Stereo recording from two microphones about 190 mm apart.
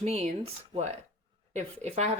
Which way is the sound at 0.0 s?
35° right (ahead or behind).